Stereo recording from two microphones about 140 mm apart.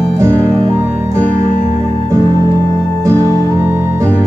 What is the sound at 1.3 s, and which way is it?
Music, 65° left (ahead or behind).